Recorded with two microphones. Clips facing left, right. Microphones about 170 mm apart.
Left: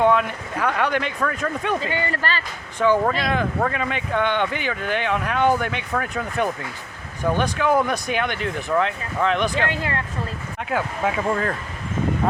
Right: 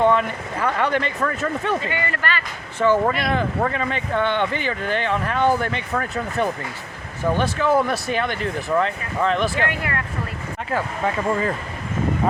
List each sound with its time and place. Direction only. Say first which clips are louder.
0.0 s speech: even; 5° left (ahead or behind)
1.2 s speech: right 1 dB; 5° right (ahead or behind)
1.9 s a man's voice: left 1 dB; 30° left (ahead or behind)
2.7 s speech: right 1 dB; 15° left (ahead or behind)
3.1 s speech: right 1 dB; centre (ahead or behind)
7.9 s speech: right 1 dB; 15° left (ahead or behind)
8.2 s speech: right 1 dB; centre (ahead or behind)
9.6 s speech: even; 25° left (ahead or behind)
10.7 s speech: even; centre (ahead or behind)